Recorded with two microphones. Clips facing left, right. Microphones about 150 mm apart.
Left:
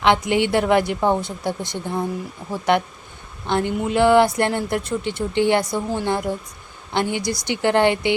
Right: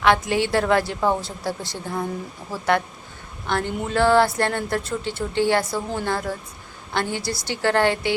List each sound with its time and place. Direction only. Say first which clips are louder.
0.0 s a woman's voice: left 2 dB; 20° left (ahead or behind)